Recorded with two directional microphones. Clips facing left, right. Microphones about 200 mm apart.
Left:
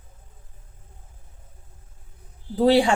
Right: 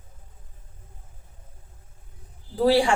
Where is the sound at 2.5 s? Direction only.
20° left (ahead or behind).